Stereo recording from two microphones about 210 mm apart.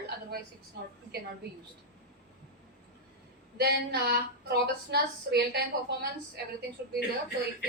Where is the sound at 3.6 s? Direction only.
50° right (ahead or behind).